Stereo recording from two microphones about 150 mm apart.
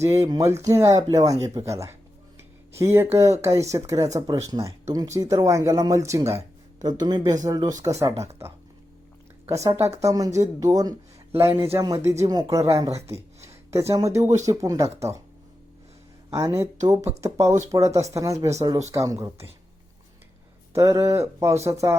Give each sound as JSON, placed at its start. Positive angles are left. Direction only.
{"t": 0.0, "sound": "speech", "side_deg": -20}
{"t": 9.5, "sound": "speech", "side_deg": -20}
{"t": 16.3, "sound": "speech", "side_deg": -20}
{"t": 20.7, "sound": "speech", "side_deg": -20}